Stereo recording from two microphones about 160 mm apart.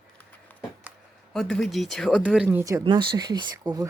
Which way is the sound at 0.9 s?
10° right (ahead or behind).